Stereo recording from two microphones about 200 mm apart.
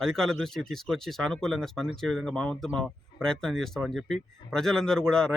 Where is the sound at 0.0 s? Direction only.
Centre (ahead or behind).